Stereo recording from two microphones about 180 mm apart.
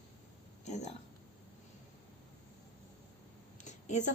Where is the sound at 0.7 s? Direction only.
40° left (ahead or behind).